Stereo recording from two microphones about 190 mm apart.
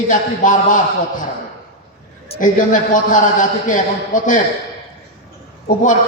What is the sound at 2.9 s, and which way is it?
A man's voice, 40° left (ahead or behind).